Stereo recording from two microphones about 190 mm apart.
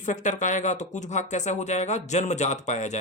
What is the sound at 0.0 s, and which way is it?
Speech, 40° left (ahead or behind).